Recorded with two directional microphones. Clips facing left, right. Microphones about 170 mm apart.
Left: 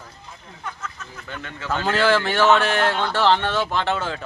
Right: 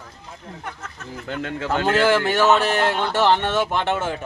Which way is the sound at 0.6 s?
60° right (ahead or behind).